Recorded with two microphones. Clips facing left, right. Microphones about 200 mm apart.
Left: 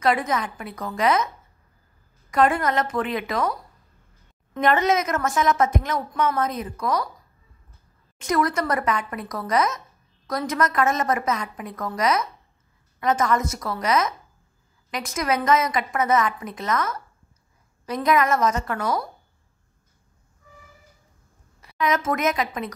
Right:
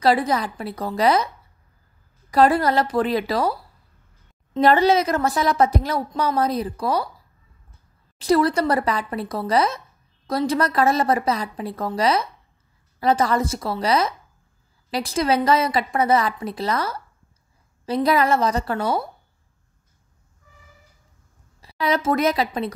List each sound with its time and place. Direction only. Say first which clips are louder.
0.0 s a woman's voice: right 3 dB; 35° right (ahead or behind)
2.3 s a woman's voice: right 3 dB; 35° right (ahead or behind)
4.6 s a woman's voice: right 4 dB; 35° right (ahead or behind)
8.2 s a woman's voice: right 5 dB; 30° right (ahead or behind)
21.5 s a woman's voice: right 1 dB; 30° right (ahead or behind)